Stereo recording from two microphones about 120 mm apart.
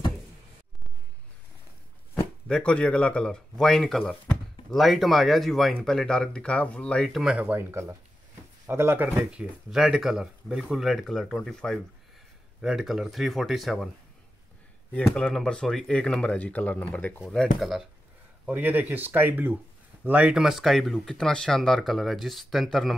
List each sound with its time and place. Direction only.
2.4 s speech: 5° left (ahead or behind)
7.3 s speech: 15° right (ahead or behind); by 13.8 s centre (ahead or behind)
15.0 s speech: 5° left (ahead or behind)
17.2 s speech: centre (ahead or behind)
18.4 s speech: 15° right (ahead or behind)